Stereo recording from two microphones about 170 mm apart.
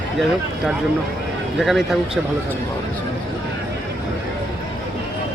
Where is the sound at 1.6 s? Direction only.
Centre (ahead or behind).